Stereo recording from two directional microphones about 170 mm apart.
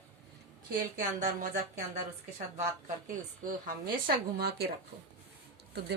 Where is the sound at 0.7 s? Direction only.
50° right (ahead or behind).